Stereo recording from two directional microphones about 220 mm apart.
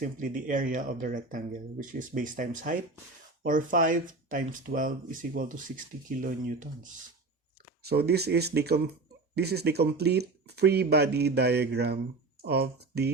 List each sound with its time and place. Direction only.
0.0 s speech: 40° right (ahead or behind)